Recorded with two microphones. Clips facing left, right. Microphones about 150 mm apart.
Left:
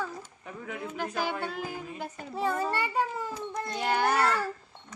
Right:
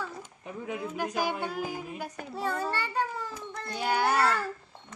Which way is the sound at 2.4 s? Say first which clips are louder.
Left 3 dB; 5° left (ahead or behind).